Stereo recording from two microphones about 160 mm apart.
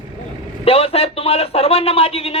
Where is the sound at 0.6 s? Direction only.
40° left (ahead or behind).